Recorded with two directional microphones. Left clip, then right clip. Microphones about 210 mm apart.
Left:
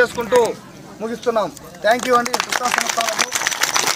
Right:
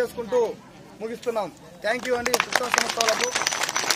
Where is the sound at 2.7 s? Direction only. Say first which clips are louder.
Left 1 dB; 50° left (ahead or behind).